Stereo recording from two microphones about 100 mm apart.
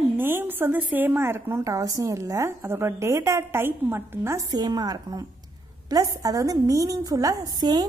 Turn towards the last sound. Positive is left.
turn(degrees=-45)  # may be behind; listen again after turning